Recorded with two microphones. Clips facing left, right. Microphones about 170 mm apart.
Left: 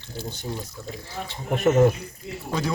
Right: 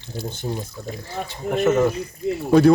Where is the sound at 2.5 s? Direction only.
60° right (ahead or behind).